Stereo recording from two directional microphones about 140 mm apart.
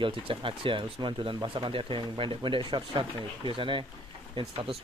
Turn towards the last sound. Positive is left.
turn(degrees=-40)  # may be behind; listen again after turning